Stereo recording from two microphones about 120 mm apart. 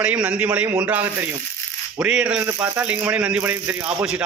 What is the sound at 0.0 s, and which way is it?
A man's voice, 10° right (ahead or behind).